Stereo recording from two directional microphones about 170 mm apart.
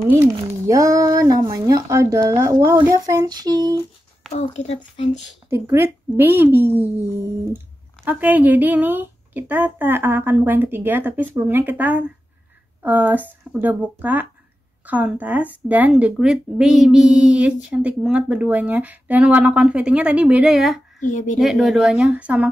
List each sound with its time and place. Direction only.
0.2 s speech: 20° right (ahead or behind)
4.3 s a child's voice: 40° left (ahead or behind)
5.5 s speech: 15° right (ahead or behind)
21.0 s speech: 50° left (ahead or behind)
21.4 s speech: centre (ahead or behind)